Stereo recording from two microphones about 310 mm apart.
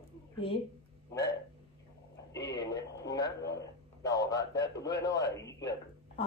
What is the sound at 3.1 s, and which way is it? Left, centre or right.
A man's voice, centre.